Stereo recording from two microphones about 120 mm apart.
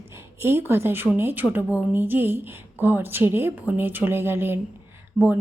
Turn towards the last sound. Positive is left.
turn(degrees=10)  # may be behind; listen again after turning